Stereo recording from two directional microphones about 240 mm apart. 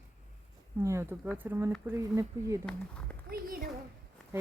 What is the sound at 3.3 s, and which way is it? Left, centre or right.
Speech, right.